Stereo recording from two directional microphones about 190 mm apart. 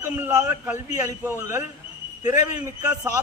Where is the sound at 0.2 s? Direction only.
15° right (ahead or behind).